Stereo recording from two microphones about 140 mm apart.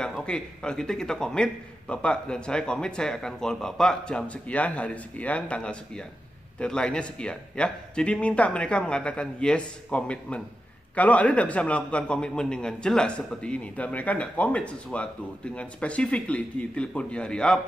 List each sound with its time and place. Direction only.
0.0 s a man's voice: 5° left (ahead or behind)